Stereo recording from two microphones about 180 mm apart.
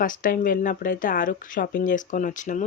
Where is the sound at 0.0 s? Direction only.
50° left (ahead or behind).